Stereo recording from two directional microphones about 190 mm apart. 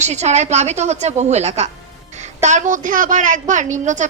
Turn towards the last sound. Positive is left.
turn(degrees=-40)  # may be behind; listen again after turning